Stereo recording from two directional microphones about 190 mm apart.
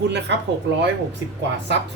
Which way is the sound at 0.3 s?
70° right (ahead or behind).